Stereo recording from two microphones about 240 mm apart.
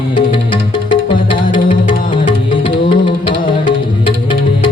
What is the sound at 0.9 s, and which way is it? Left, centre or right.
Music, centre.